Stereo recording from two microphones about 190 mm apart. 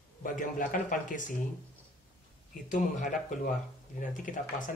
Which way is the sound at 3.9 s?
45° left (ahead or behind).